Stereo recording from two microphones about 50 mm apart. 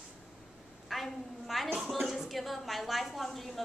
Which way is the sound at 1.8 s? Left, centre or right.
Centre.